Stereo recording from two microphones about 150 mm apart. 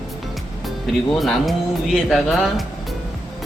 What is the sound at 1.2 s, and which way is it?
Speech, centre (ahead or behind).